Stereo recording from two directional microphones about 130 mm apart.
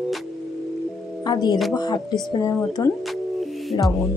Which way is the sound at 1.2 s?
30° left (ahead or behind).